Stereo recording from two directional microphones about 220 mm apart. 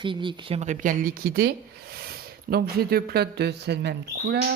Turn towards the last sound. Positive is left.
turn(degrees=-50)  # may be behind; listen again after turning